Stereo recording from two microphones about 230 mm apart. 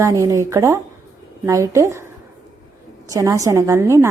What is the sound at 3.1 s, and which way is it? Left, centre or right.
A woman's voice, centre.